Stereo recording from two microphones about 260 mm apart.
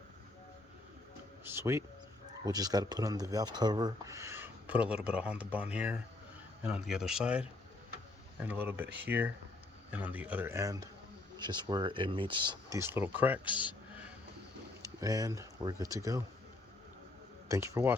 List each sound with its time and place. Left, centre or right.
1.5 s speech: centre
14.8 s speech: centre
17.5 s speech: centre